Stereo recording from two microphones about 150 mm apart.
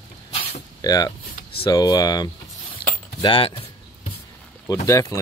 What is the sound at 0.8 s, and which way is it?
Speech, 25° left (ahead or behind).